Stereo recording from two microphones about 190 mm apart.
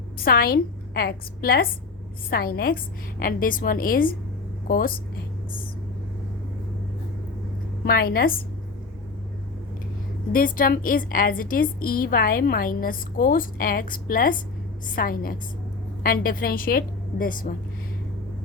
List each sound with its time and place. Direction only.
0.3 s a woman's voice: 50° left (ahead or behind)
7.9 s a woman's voice: 50° left (ahead or behind)
10.3 s a woman's voice: 45° left (ahead or behind)